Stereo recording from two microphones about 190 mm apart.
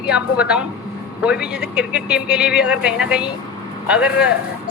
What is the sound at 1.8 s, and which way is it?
A man's voice, 5° right (ahead or behind).